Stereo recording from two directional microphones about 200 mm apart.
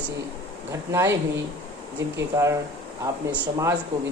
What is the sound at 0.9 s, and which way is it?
Speech, 15° right (ahead or behind).